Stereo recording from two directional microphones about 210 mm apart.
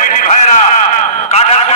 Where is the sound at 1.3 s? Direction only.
30° left (ahead or behind).